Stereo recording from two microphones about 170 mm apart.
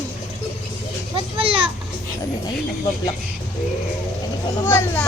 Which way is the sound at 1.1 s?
35° right (ahead or behind).